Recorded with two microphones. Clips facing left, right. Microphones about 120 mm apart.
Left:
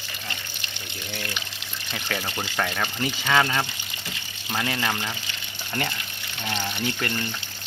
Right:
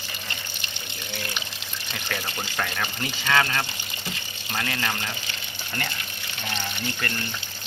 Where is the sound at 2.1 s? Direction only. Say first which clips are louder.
Left 2 dB; 5° left (ahead or behind).